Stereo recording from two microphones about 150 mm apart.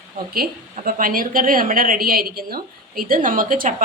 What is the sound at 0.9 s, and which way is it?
A woman's voice, 65° right (ahead or behind).